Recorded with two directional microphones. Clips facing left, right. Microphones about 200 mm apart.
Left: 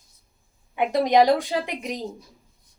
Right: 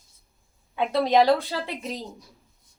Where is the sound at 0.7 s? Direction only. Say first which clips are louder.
Left 2 dB; 15° left (ahead or behind).